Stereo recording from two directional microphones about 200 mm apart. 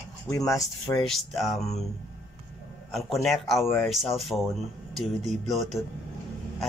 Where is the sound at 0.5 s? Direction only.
15° left (ahead or behind).